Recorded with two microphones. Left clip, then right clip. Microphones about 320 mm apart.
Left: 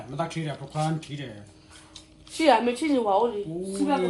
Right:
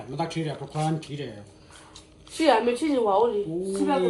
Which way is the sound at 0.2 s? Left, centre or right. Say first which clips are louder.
Right 1 dB; centre.